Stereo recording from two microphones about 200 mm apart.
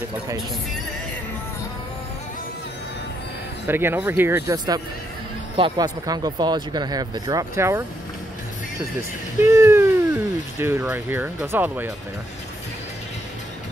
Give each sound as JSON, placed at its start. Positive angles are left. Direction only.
{"t": 3.6, "sound": "speech", "side_deg": -10}
{"t": 9.4, "sound": "speech", "side_deg": -15}